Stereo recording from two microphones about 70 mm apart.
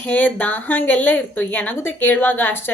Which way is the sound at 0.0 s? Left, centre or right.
Centre.